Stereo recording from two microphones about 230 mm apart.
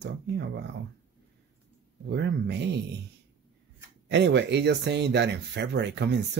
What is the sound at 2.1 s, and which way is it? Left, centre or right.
Speech, right.